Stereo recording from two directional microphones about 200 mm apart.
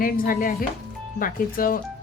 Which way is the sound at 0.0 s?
45° left (ahead or behind).